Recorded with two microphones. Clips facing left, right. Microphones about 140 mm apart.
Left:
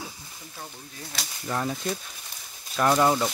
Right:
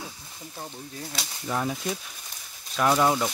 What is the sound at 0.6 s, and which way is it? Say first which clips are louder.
Speech: right 4 dB; 20° right (ahead or behind).